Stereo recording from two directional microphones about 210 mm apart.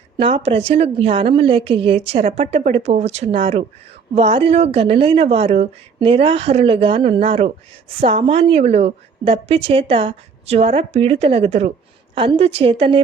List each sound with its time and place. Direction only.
0.2 s a woman's voice: 25° right (ahead or behind)